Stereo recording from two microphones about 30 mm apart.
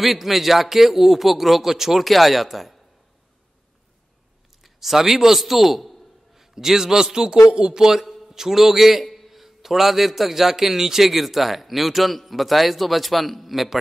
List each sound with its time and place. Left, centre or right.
0.0 s speech: centre
2.0 s speech: centre
4.6 s a sound: centre
6.5 s a man's voice: centre